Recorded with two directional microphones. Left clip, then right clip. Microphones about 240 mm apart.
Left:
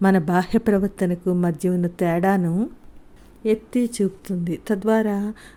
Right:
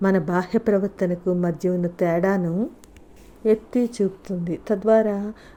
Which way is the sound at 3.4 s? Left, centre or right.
Centre.